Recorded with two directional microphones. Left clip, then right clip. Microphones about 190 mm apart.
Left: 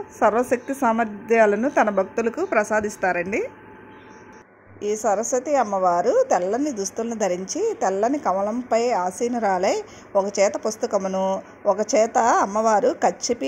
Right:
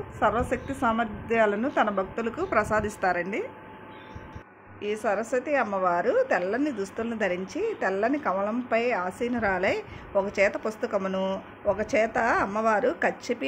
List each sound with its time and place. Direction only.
0.2 s a woman's voice: 30° left (ahead or behind)
4.7 s a woman's voice: 25° left (ahead or behind)
5.7 s speech: 5° left (ahead or behind)
6.0 s a woman's voice: 25° left (ahead or behind)
8.3 s speech: 15° left (ahead or behind)
8.6 s a woman's voice: 25° left (ahead or behind)
11.0 s speech: 15° left (ahead or behind)
11.9 s a woman's voice: 30° left (ahead or behind)